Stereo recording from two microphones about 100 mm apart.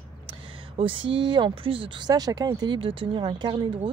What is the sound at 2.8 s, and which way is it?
Speech, 60° right (ahead or behind).